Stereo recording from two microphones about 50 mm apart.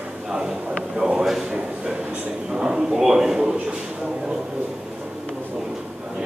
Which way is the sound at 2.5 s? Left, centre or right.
Centre.